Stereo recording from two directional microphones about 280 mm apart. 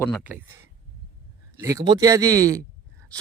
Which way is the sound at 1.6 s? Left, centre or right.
Centre.